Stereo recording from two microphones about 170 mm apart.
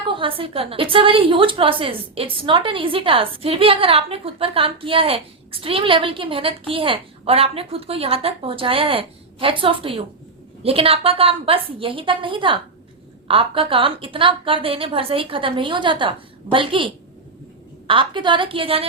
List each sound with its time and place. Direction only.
0.1 s a woman's voice: 30° right (ahead or behind)